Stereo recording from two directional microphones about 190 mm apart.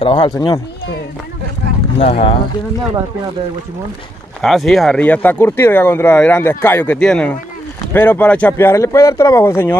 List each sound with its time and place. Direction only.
0.0 s speech: 25° left (ahead or behind)
2.0 s speech: 30° left (ahead or behind)
4.4 s speech: centre (ahead or behind)